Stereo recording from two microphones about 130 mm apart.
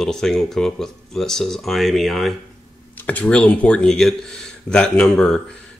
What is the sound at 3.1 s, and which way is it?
Speech, 10° left (ahead or behind).